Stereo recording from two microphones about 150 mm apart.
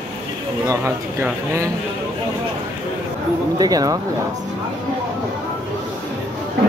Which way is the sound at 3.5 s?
25° right (ahead or behind).